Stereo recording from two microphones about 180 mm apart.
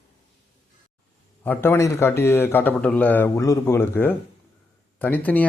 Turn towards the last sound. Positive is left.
turn(degrees=10)  # may be behind; listen again after turning